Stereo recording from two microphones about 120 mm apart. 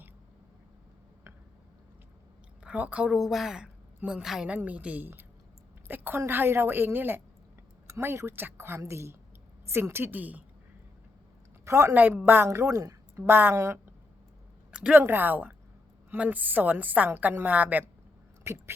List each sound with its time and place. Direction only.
2.6 s a woman's voice: 10° right (ahead or behind)
11.6 s a woman's voice: 25° right (ahead or behind)
14.7 s a sound: 5° right (ahead or behind)
15.0 s a woman's voice: 15° right (ahead or behind)